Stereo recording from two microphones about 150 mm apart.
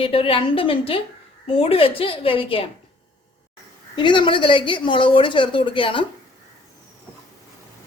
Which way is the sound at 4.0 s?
30° left (ahead or behind).